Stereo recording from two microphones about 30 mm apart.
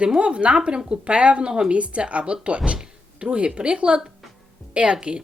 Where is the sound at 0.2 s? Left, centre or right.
Right.